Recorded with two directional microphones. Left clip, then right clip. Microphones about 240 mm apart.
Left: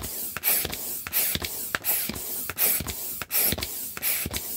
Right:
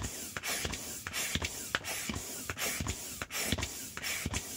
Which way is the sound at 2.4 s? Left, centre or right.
Left.